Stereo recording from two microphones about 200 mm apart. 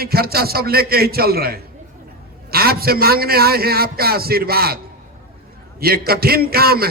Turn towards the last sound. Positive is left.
turn(degrees=-50)  # may be behind; listen again after turning